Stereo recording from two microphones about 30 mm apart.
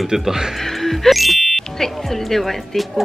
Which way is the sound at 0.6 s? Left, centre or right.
Centre.